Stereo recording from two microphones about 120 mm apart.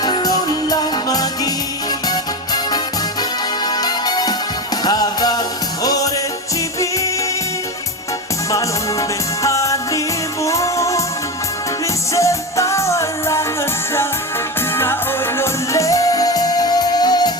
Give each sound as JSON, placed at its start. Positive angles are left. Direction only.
{"t": 0.0, "sound": "music", "side_deg": 35}
{"t": 8.4, "sound": "music", "side_deg": 25}
{"t": 12.1, "sound": "music", "side_deg": 25}
{"t": 15.4, "sound": "music", "side_deg": 25}